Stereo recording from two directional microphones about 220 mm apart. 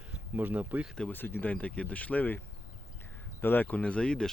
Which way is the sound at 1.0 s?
10° left (ahead or behind).